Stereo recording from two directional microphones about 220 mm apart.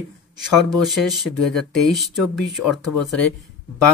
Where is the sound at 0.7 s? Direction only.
Centre (ahead or behind).